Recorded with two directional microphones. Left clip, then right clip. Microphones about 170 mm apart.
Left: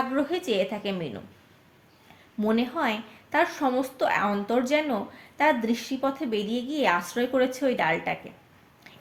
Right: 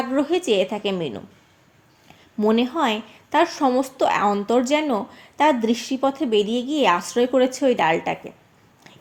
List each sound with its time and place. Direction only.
0.1 s a woman's voice: 40° right (ahead or behind)
2.4 s a woman's voice: 35° right (ahead or behind)